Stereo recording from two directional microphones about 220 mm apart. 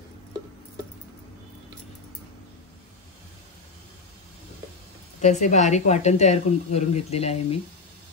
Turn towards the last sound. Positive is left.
turn(degrees=30)  # may be behind; listen again after turning